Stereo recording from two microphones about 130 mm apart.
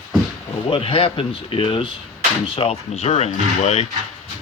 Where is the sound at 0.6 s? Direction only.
45° left (ahead or behind).